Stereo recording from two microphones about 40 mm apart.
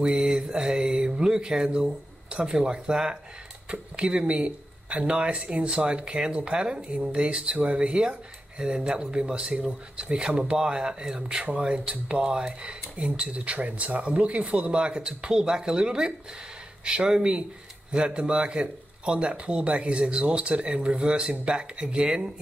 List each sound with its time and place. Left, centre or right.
0.0 s a man's voice: centre
11.7 s speech: right
12.2 s a man's voice: right